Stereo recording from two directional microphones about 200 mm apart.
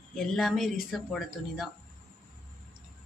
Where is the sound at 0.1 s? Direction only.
Centre (ahead or behind).